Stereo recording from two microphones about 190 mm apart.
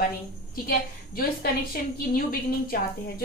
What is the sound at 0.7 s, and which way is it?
A woman's voice, 50° left (ahead or behind).